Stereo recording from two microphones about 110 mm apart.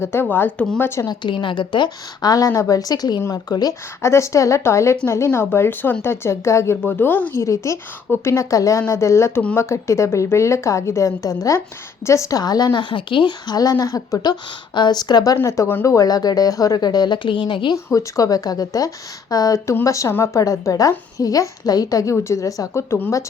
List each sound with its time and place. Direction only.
0.0 s speech: 20° left (ahead or behind)
1.0 s speech: 45° left (ahead or behind); by 7.4 s 15° left (ahead or behind)
7.4 s speech: 25° left (ahead or behind)
15.4 s speech: 25° left (ahead or behind); by 17.7 s 50° left (ahead or behind)
17.8 s speech: 30° left (ahead or behind)